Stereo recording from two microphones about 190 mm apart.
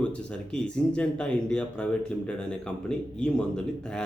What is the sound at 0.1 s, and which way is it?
Speech, 5° left (ahead or behind).